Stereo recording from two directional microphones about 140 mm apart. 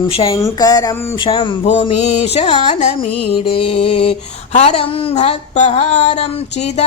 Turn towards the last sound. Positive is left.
turn(degrees=55)  # may be behind; listen again after turning